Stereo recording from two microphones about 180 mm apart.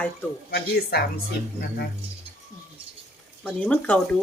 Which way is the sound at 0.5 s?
60° left (ahead or behind).